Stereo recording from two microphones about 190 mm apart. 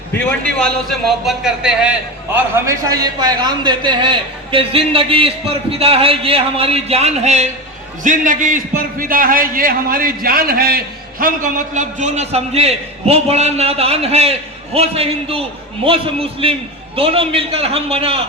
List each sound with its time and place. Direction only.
0.6 s a man's voice: centre (ahead or behind); by 18.2 s 30° right (ahead or behind)